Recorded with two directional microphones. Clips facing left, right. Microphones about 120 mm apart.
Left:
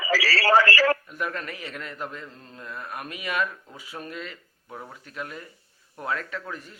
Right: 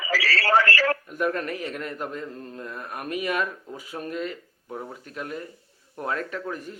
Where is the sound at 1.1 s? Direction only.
45° right (ahead or behind).